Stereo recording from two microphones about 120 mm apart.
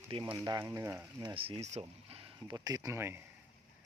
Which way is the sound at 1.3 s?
50° right (ahead or behind).